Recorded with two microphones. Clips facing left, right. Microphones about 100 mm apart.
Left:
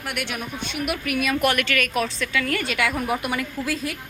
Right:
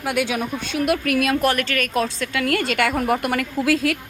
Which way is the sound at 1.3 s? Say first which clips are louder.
Right 2 dB; 35° right (ahead or behind).